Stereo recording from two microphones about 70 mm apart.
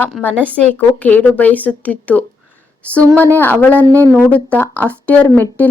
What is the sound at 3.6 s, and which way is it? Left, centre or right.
A woman's voice, left.